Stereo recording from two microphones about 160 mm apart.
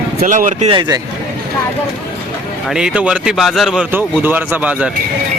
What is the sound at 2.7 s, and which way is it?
Speech, 5° right (ahead or behind).